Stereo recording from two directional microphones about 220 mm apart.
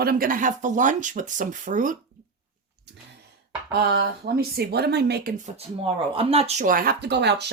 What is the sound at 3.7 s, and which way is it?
Speech, 45° right (ahead or behind).